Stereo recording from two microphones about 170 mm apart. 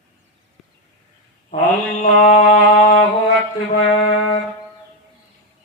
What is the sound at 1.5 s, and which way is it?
Mantra, 45° left (ahead or behind).